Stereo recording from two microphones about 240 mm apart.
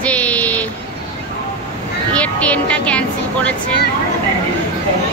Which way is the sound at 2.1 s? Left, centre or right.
Centre.